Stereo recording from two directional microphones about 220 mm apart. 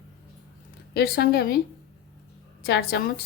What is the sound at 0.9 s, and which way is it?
Speech, 45° left (ahead or behind).